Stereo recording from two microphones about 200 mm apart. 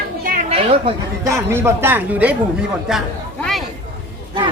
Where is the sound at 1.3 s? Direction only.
15° right (ahead or behind).